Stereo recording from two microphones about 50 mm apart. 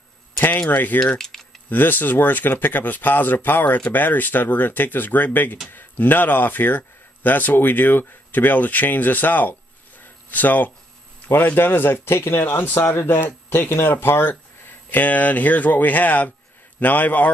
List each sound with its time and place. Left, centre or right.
0.7 s speech: left
0.9 s tick-tock: centre
1.7 s speech: left
14.9 s speech: left